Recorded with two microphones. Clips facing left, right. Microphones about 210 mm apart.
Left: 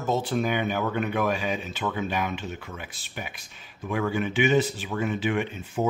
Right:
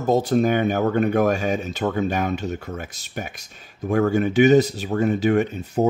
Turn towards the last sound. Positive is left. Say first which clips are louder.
# right 6 dB
turn(degrees=-40)  # may be behind; listen again after turning